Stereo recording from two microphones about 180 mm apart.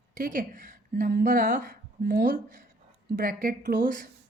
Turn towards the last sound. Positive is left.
turn(degrees=-50)  # may be behind; listen again after turning